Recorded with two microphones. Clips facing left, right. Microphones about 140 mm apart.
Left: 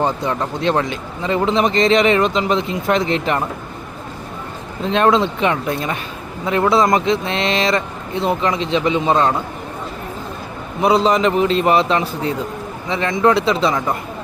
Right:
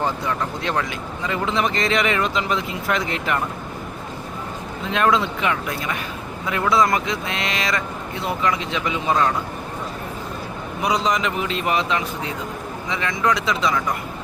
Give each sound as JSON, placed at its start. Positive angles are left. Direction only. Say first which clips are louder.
{"t": 0.0, "sound": "speech", "louder": "left 4 dB", "side_deg": 25}
{"t": 4.9, "sound": "speech", "louder": "left 5 dB", "side_deg": 30}
{"t": 10.8, "sound": "a man's voice", "louder": "left 7 dB", "side_deg": 30}